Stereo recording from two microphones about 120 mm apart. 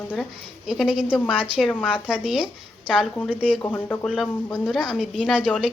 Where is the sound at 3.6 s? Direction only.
15° left (ahead or behind).